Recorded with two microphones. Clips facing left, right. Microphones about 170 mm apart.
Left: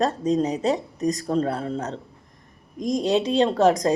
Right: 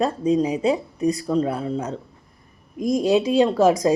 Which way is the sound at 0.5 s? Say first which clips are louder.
Right 2 dB; 40° left (ahead or behind).